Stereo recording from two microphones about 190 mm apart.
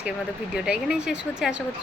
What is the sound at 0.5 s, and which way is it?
A woman's voice, 5° right (ahead or behind).